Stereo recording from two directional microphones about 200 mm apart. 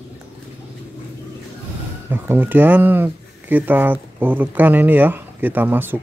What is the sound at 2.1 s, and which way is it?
Speech, 10° right (ahead or behind).